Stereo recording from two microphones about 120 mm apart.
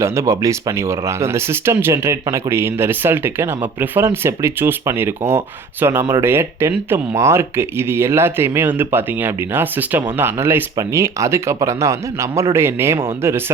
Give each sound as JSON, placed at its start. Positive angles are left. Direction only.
{"t": 0.0, "sound": "speech", "side_deg": -25}